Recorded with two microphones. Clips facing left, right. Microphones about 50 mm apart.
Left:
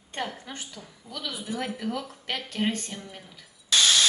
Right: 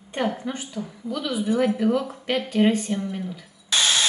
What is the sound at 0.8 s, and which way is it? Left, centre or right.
Speech, right.